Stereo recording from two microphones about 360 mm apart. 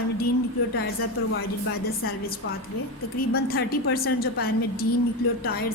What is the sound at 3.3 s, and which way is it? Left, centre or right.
A woman's voice, left.